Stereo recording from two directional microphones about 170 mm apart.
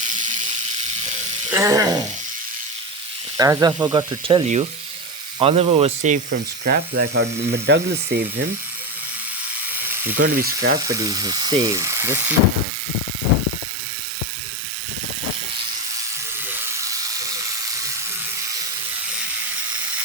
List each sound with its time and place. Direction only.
1.5 s speech: 15° right (ahead or behind)
3.3 s speech: 20° right (ahead or behind)
4.4 s speech: 40° right (ahead or behind)
6.7 s speech: 80° right
9.7 s electric toothbrush: 10° right (ahead or behind)
10.2 s speech: 55° right (ahead or behind)
10.8 s speech: 20° right (ahead or behind)
16.5 s electric toothbrush: 20° right (ahead or behind)